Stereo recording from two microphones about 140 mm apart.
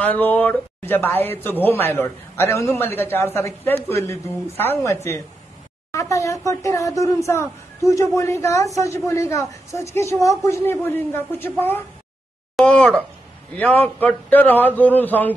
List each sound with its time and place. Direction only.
0.0 s a man's voice: 10° left (ahead or behind)